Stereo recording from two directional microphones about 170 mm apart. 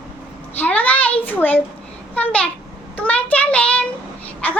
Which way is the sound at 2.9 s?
10° left (ahead or behind).